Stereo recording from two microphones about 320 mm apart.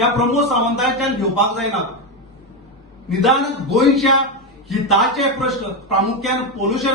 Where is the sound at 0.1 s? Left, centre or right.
Centre.